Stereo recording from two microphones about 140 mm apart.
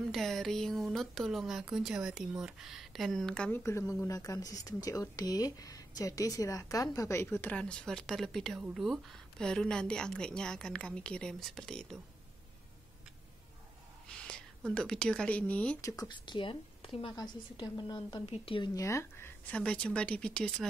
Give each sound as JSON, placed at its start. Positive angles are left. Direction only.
{"t": 0.0, "sound": "speech", "side_deg": 0}
{"t": 3.6, "sound": "speech", "side_deg": 20}
{"t": 7.3, "sound": "speech", "side_deg": 10}
{"t": 14.0, "sound": "speech", "side_deg": 5}
{"t": 15.8, "sound": "speech", "side_deg": 30}
{"t": 18.8, "sound": "a woman's voice", "side_deg": 20}